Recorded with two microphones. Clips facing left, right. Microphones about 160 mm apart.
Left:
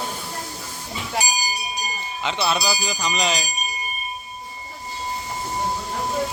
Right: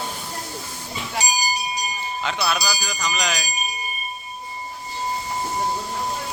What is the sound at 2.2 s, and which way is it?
Speech, 25° left (ahead or behind).